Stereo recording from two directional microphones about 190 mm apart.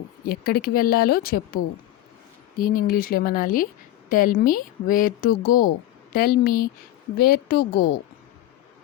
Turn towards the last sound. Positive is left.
turn(degrees=55)  # may be behind; listen again after turning